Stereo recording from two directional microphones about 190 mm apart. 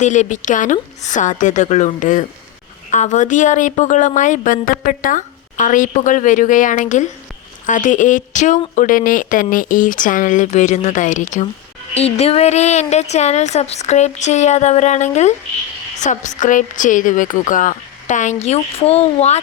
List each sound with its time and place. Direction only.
0.0 s speech: 40° left (ahead or behind)